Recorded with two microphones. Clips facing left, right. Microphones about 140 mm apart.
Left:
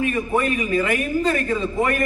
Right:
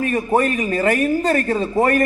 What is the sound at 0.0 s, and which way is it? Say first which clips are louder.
A man's voice: right 3 dB; 45° right (ahead or behind).